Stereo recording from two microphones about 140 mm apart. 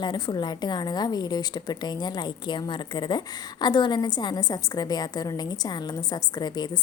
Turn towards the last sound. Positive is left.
turn(degrees=30)  # may be behind; listen again after turning